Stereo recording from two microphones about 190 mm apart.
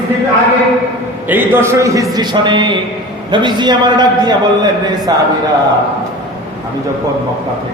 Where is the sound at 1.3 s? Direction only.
10° right (ahead or behind).